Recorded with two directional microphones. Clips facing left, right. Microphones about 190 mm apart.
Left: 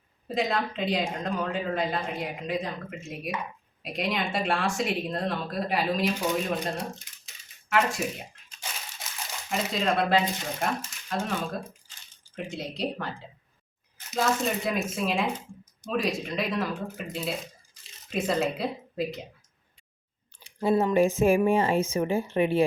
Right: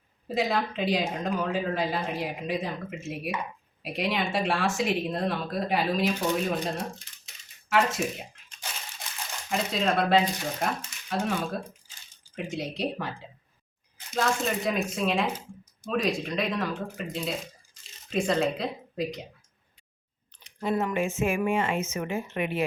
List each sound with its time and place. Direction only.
0.3 s speech: 5° right (ahead or behind)
8.0 s speech: 5° left (ahead or behind)
9.5 s speech: centre (ahead or behind)
12.5 s speech: centre (ahead or behind)
14.1 s speech: centre (ahead or behind)
20.4 s speech: 30° left (ahead or behind)